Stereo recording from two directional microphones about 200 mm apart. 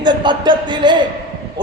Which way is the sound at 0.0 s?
20° right (ahead or behind).